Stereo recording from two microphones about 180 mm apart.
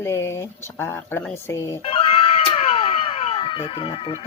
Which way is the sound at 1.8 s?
30° left (ahead or behind).